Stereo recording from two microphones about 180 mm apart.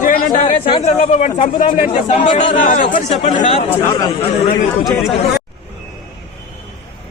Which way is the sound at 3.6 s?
15° left (ahead or behind).